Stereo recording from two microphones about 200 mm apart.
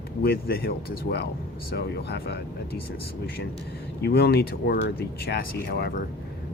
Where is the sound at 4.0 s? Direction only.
50° left (ahead or behind).